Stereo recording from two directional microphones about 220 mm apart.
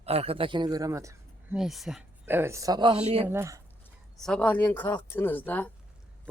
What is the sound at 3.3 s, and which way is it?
Speech, 10° right (ahead or behind).